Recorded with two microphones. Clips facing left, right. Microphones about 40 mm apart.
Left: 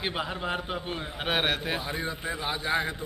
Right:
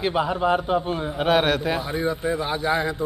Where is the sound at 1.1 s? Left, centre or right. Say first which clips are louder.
Right 8 dB; centre.